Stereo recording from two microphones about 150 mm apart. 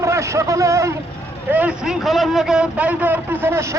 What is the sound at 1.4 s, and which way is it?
A man's voice, 10° right (ahead or behind).